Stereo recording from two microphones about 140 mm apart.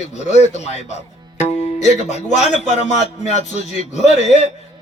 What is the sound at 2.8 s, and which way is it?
A man's voice, 55° left (ahead or behind).